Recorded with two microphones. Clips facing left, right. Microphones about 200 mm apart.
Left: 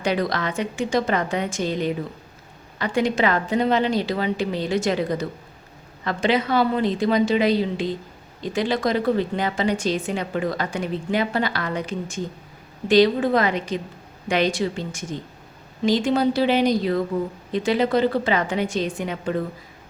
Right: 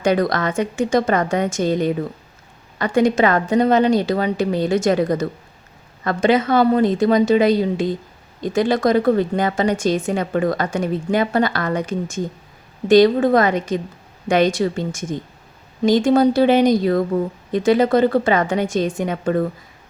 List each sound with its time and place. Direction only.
0.0 s a woman's voice: 45° right (ahead or behind)